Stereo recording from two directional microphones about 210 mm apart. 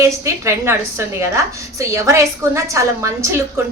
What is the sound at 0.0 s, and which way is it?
A woman's voice, 15° right (ahead or behind).